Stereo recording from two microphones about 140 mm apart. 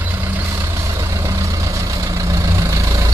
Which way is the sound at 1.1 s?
20° right (ahead or behind).